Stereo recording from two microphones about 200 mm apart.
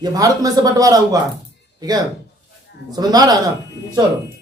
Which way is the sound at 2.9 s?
20° right (ahead or behind).